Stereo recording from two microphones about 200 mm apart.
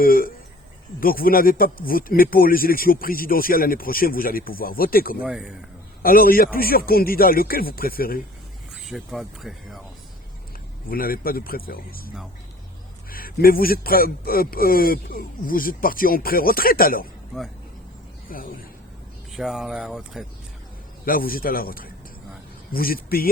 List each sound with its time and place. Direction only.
0.0 s speech: 45° left (ahead or behind)
5.2 s speech: 5° right (ahead or behind)
6.0 s speech: 45° left (ahead or behind)
8.7 s speech: centre (ahead or behind)
10.8 s speech: 45° left (ahead or behind)
17.3 s speech: centre (ahead or behind)
18.3 s speech: 45° left (ahead or behind)
19.3 s speech: centre (ahead or behind)
21.0 s speech: 45° left (ahead or behind)